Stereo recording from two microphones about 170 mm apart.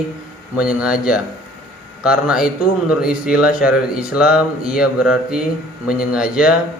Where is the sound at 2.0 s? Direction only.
5° right (ahead or behind).